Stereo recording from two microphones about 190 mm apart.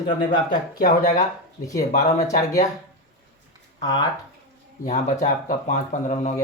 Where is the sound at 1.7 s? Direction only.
45° left (ahead or behind).